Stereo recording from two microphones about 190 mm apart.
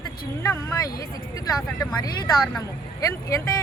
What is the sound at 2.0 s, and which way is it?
Speech, 20° left (ahead or behind).